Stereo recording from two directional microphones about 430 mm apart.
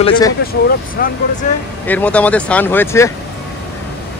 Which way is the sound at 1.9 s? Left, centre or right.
Centre.